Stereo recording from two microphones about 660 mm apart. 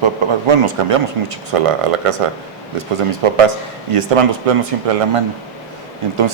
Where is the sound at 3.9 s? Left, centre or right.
Right.